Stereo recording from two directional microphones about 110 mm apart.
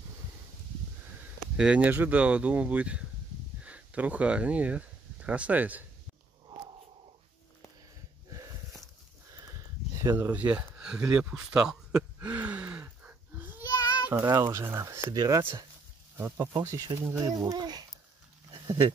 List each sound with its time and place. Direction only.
1.6 s speech: 10° right (ahead or behind)
9.9 s a sound: 25° right (ahead or behind)
13.6 s child singing: 35° left (ahead or behind)
14.0 s speech: 15° right (ahead or behind); by 15.4 s 35° right (ahead or behind)
16.2 s speech: 20° right (ahead or behind); by 17.8 s 35° right (ahead or behind)
18.5 s a sound: 30° right (ahead or behind)